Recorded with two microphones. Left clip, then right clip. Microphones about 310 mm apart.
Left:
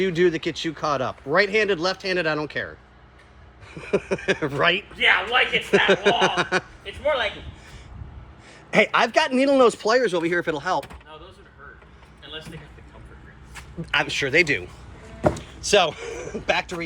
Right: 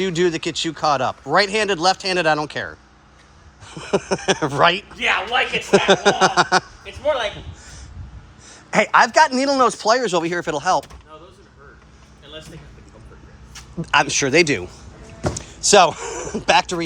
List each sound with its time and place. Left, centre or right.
0.0 s speech: centre
5.0 s speech: right
5.8 s speech: centre
7.0 s speech: right
8.4 s speech: centre
13.8 s speech: centre